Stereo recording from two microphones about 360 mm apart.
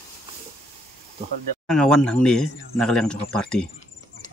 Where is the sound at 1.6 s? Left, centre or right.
Centre.